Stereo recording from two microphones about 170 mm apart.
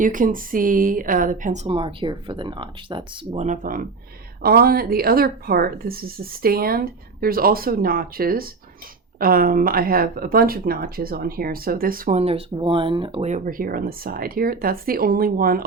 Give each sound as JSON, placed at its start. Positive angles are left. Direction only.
{"t": 0.0, "sound": "speech", "side_deg": -50}
{"t": 1.6, "sound": "speech", "side_deg": -30}
{"t": 3.3, "sound": "speech", "side_deg": -45}
{"t": 12.1, "sound": "speech", "side_deg": -35}